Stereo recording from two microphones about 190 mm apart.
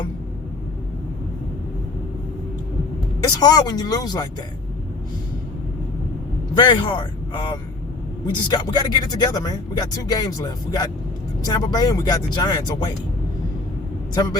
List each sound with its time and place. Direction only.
3.2 s speech: 20° left (ahead or behind)
6.5 s a man's voice: 25° left (ahead or behind)